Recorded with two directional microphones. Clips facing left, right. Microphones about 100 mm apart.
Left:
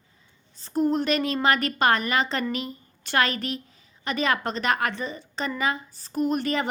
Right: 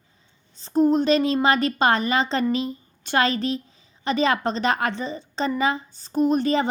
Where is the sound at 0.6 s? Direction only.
25° right (ahead or behind).